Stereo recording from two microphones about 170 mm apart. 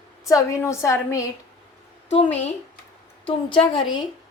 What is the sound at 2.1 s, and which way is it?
Speech, 35° left (ahead or behind).